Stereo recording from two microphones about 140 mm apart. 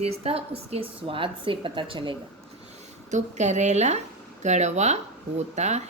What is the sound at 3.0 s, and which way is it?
A woman's voice, 60° right (ahead or behind).